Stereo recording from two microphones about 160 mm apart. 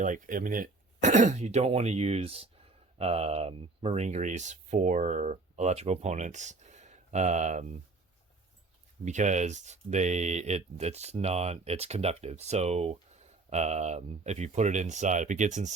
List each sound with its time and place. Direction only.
0.0 s speech: 55° right (ahead or behind)
9.0 s speech: 50° right (ahead or behind)